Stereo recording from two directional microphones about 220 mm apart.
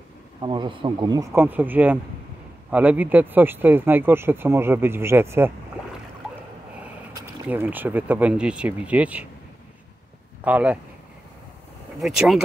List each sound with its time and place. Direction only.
0.4 s speech: 20° right (ahead or behind)
7.4 s speech: 10° right (ahead or behind)
10.4 s speech: 5° right (ahead or behind)
12.0 s speech: centre (ahead or behind)